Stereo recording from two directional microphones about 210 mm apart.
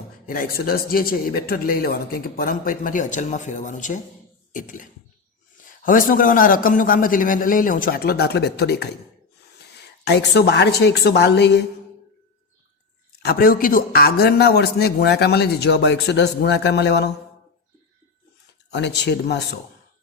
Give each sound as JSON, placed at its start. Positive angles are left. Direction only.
{"t": 0.3, "sound": "a man's voice", "side_deg": 45}
{"t": 10.0, "sound": "a man's voice", "side_deg": 55}
{"t": 13.2, "sound": "a man's voice", "side_deg": 45}
{"t": 18.7, "sound": "a man's voice", "side_deg": 55}